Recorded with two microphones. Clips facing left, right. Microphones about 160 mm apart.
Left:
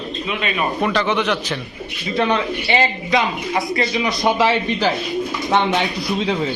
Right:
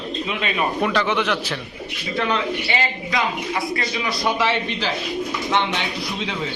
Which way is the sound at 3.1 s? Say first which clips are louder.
Left 4 dB; 20° left (ahead or behind).